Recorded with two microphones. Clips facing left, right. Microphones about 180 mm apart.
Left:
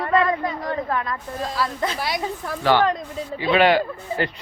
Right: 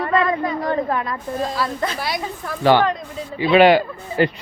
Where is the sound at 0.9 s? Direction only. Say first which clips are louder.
Right 3 dB; 20° right (ahead or behind).